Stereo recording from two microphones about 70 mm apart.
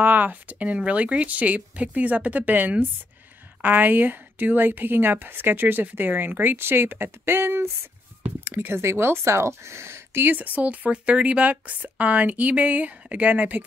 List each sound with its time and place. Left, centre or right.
0.0 s speech: right